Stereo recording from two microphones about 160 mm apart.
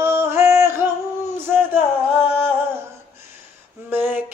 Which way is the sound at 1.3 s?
15° right (ahead or behind).